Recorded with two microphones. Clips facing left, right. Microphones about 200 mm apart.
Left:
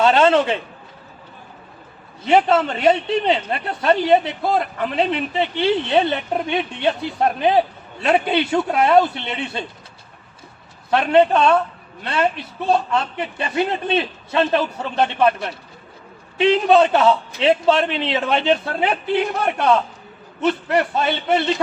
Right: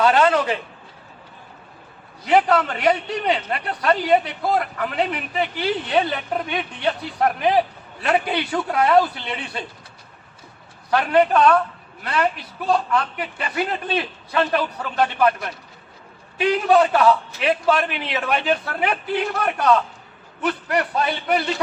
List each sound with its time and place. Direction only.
0.0 s a woman's voice: 25° left (ahead or behind)
2.2 s a woman's voice: 25° left (ahead or behind)
10.9 s a woman's voice: 25° left (ahead or behind)